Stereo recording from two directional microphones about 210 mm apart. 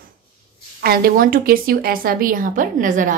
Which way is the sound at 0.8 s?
45° right (ahead or behind).